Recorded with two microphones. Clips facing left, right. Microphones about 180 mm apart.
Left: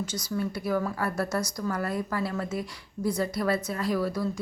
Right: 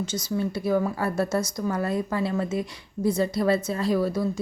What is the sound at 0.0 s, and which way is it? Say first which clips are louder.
Speech: right 3 dB; 25° right (ahead or behind).